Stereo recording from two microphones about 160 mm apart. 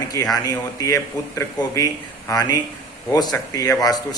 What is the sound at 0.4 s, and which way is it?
A man's voice, 20° left (ahead or behind).